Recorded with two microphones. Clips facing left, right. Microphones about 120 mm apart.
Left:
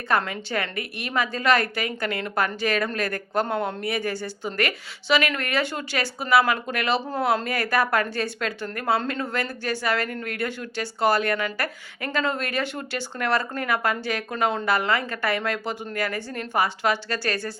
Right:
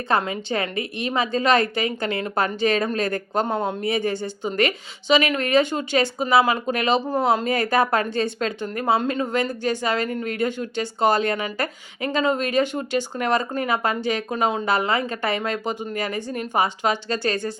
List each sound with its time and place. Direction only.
0.1 s a woman's voice: 20° right (ahead or behind)